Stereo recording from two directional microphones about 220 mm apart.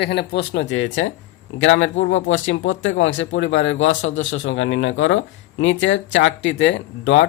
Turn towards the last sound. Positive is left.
turn(degrees=55)  # may be behind; listen again after turning